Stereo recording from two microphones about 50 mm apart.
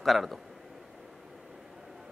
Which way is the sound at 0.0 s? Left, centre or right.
Centre.